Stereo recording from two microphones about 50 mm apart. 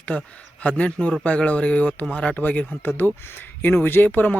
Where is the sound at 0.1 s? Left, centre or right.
Left.